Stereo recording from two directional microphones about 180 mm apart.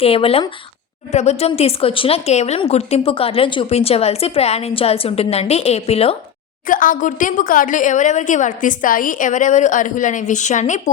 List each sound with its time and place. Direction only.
0.0 s a woman's voice: 30° left (ahead or behind)
6.7 s a woman's voice: 50° left (ahead or behind)